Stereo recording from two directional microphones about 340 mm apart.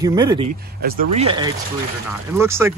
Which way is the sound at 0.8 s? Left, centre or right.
Right.